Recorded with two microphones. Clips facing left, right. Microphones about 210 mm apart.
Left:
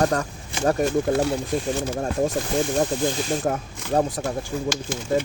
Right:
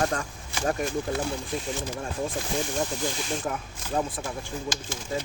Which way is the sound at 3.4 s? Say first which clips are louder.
Left 7 dB; 40° left (ahead or behind).